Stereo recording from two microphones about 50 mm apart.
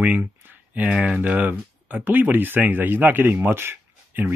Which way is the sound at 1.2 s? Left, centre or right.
Right.